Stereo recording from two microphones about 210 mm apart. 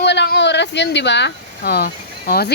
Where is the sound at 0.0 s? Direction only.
55° left (ahead or behind).